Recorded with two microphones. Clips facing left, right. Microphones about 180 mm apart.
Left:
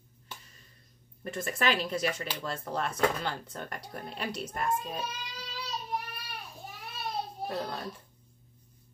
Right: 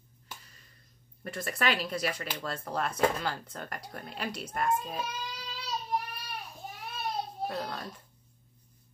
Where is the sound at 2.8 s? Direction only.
5° right (ahead or behind).